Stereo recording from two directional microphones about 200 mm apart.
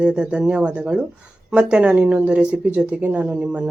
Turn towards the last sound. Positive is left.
turn(degrees=-5)  # may be behind; listen again after turning